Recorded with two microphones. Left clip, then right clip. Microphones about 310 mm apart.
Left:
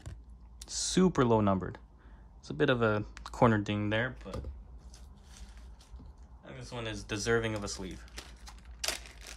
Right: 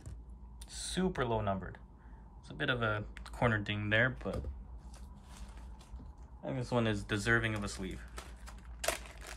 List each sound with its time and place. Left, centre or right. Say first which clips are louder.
0.6 s typing: left 8 dB; centre
1.1 s speech: left 5 dB; centre
6.4 s a sound: right 7 dB; centre